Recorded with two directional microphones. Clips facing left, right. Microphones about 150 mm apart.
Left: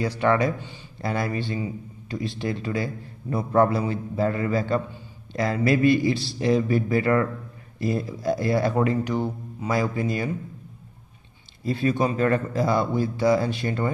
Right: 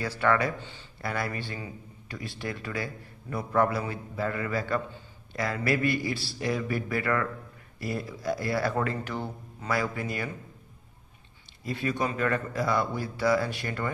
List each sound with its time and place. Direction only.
0.0 s speech: 20° left (ahead or behind)
11.6 s speech: 30° left (ahead or behind)